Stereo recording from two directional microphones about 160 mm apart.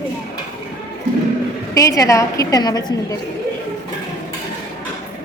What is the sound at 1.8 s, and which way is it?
A woman's voice, 20° left (ahead or behind).